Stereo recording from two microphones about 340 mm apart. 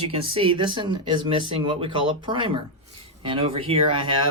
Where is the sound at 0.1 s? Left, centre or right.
Centre.